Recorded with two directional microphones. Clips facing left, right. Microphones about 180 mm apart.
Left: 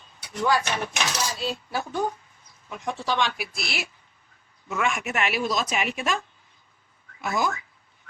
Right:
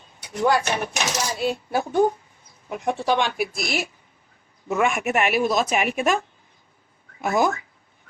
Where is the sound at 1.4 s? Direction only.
55° right (ahead or behind).